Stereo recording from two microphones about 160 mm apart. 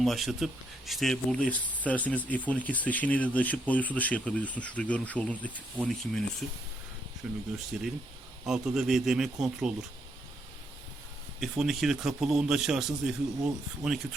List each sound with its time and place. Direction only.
0.0 s speech: centre (ahead or behind)
7.2 s speech: 5° right (ahead or behind)
11.3 s speech: centre (ahead or behind)